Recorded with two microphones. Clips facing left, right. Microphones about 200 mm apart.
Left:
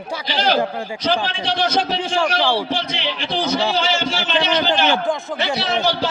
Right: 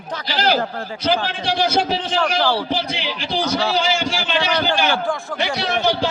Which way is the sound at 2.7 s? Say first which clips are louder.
Even; 10° right (ahead or behind).